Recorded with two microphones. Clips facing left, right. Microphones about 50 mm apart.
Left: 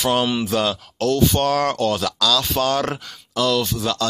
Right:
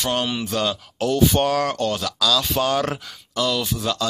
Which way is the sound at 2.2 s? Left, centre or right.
Centre.